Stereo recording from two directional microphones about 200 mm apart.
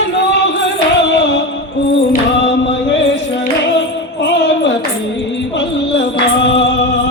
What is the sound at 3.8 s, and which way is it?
Music, 60° left (ahead or behind).